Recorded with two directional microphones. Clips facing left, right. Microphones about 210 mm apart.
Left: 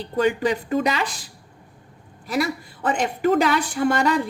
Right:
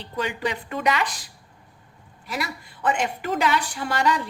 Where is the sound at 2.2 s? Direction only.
40° left (ahead or behind).